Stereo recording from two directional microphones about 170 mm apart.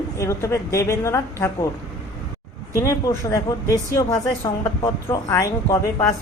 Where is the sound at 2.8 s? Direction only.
20° left (ahead or behind).